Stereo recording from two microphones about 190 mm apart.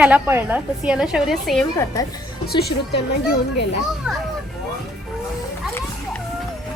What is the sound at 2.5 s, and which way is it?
Speech, 55° left (ahead or behind).